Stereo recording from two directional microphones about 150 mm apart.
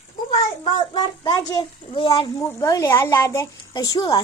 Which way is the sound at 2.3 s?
20° left (ahead or behind).